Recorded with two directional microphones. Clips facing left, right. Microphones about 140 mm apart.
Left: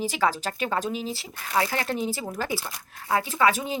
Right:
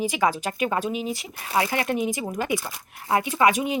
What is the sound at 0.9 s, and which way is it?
Speech, 30° left (ahead or behind).